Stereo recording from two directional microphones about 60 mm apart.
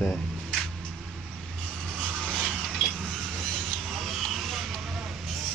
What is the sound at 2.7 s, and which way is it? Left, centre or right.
Vehicle, centre.